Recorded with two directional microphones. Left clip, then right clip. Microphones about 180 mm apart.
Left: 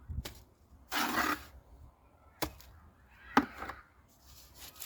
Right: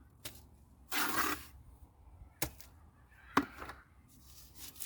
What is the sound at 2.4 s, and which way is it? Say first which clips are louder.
Honk: left 4 dB; 15° right (ahead or behind).